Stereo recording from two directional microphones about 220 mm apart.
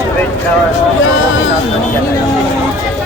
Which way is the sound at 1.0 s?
60° left (ahead or behind).